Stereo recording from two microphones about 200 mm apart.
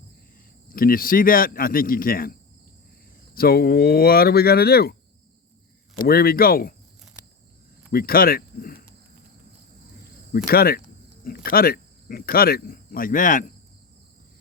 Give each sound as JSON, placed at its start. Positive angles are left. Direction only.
{"t": 0.7, "sound": "speech", "side_deg": 45}
{"t": 3.3, "sound": "speech", "side_deg": 50}
{"t": 6.0, "sound": "speech", "side_deg": 50}
{"t": 7.9, "sound": "speech", "side_deg": 45}
{"t": 10.3, "sound": "speech", "side_deg": 50}